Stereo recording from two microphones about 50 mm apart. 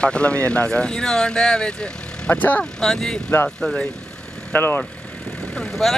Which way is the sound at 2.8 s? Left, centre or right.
Centre.